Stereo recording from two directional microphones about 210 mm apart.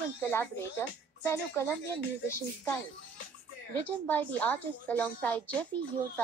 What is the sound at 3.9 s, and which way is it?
A woman's voice, 5° left (ahead or behind).